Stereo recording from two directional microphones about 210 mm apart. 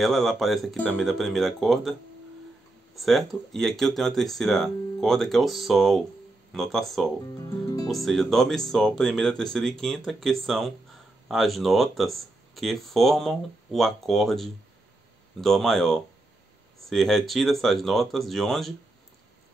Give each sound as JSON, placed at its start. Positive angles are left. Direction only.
{"t": 0.0, "sound": "speech", "side_deg": 0}
{"t": 3.0, "sound": "speech", "side_deg": 0}